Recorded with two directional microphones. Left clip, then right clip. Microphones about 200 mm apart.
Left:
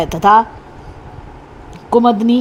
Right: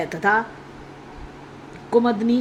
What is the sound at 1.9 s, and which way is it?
Speech, 30° left (ahead or behind).